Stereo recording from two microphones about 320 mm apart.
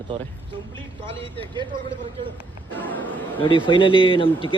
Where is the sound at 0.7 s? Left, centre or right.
Centre.